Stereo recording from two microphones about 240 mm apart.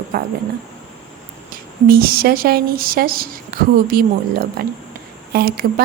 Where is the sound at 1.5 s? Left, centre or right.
Right.